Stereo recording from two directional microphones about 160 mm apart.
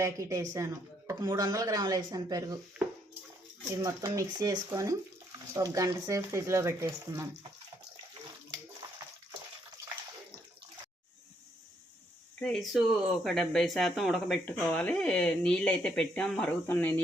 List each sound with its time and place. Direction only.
0.0 s speech: 20° right (ahead or behind)
3.7 s speech: 20° right (ahead or behind)
12.4 s speech: centre (ahead or behind)